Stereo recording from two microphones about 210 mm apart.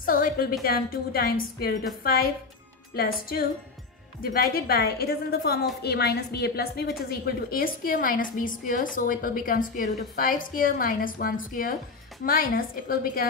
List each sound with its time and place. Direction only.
0.0 s a woman's voice: 40° left (ahead or behind)